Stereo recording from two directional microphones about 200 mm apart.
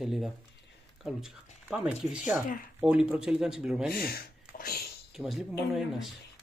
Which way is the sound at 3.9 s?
50° left (ahead or behind).